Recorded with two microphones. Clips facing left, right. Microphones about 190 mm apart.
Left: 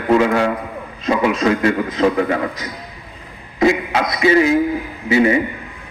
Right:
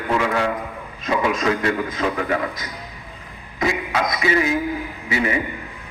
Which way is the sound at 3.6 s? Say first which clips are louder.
Left 6 dB; 30° left (ahead or behind).